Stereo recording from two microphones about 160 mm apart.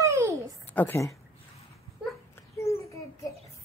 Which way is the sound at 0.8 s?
15° left (ahead or behind).